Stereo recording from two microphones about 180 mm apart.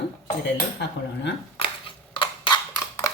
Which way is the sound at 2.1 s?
25° left (ahead or behind).